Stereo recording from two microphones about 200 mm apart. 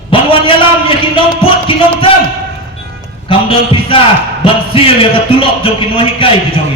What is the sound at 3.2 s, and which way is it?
A man's voice, 25° left (ahead or behind).